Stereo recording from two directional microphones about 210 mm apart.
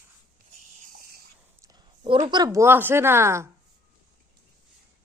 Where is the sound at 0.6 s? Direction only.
35° right (ahead or behind).